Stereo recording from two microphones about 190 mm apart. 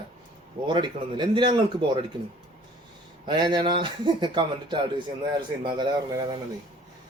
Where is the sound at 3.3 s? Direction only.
25° right (ahead or behind).